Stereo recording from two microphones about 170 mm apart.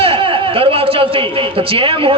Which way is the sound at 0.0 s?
30° right (ahead or behind).